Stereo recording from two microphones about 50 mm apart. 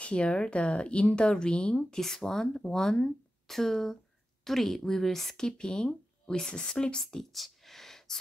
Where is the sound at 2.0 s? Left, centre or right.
Centre.